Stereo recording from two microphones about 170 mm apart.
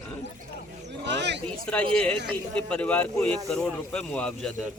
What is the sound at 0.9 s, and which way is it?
Speech, 90° right.